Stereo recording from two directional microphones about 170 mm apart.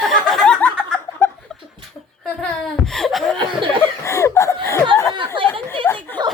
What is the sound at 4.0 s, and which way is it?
Chuckle, 15° left (ahead or behind).